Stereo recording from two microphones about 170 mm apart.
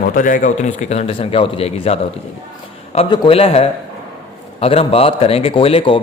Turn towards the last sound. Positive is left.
turn(degrees=30)  # may be behind; listen again after turning